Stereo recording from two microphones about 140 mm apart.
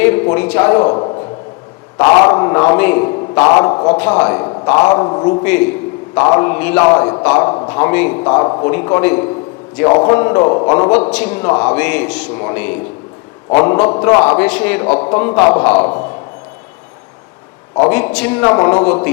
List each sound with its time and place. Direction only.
0.0 s a man's voice: 15° left (ahead or behind)
3.9 s a man's voice: 15° left (ahead or behind)
4.4 s a sound: 30° left (ahead or behind)
4.8 s a man's voice: 30° left (ahead or behind)
5.4 s a man's voice: 15° left (ahead or behind)
6.8 s a man's voice: 25° left (ahead or behind)
7.7 s a man's voice: 15° left (ahead or behind)
9.8 s a man's voice: 30° left (ahead or behind)
11.1 s a man's voice: 10° left (ahead or behind)
15.8 s a man's voice: 35° left (ahead or behind)
17.8 s a man's voice: 15° left (ahead or behind)
18.4 s a man's voice: 20° left (ahead or behind)